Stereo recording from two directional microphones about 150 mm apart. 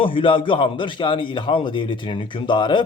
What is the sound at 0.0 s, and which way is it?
A man's voice, 35° left (ahead or behind).